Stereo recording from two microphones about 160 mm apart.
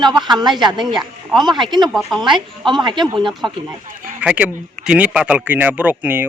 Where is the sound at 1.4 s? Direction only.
30° right (ahead or behind).